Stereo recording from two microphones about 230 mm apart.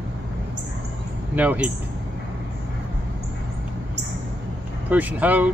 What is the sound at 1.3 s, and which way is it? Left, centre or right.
Speech, centre.